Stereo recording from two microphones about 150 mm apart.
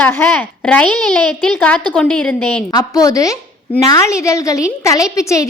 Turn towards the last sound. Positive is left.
turn(degrees=20)  # may be behind; listen again after turning